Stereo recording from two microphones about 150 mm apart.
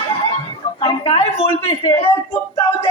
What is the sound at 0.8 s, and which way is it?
Speech, 40° left (ahead or behind).